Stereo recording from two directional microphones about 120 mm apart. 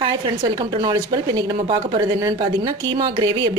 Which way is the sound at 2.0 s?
30° right (ahead or behind).